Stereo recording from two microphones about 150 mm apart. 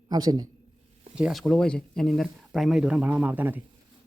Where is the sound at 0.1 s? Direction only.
25° right (ahead or behind).